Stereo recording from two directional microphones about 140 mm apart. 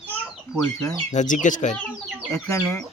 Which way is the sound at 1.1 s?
65° left (ahead or behind).